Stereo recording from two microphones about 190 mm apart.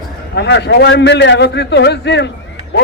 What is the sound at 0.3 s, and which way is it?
A man's voice, 65° left (ahead or behind).